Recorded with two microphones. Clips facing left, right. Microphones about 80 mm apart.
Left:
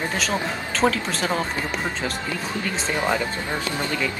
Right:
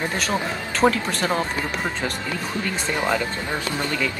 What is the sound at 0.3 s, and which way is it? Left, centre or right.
Speech, centre.